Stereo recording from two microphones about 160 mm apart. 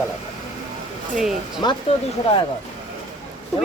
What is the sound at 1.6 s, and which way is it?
Speech, 30° left (ahead or behind).